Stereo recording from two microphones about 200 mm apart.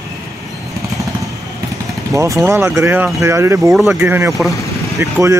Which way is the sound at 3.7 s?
Centre (ahead or behind).